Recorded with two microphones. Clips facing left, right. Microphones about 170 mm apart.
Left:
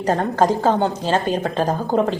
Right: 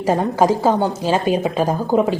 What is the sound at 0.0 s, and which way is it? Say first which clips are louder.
A woman's voice: right 2 dB; 10° right (ahead or behind).